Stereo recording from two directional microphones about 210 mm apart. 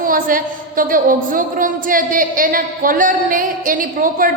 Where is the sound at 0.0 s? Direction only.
40° right (ahead or behind).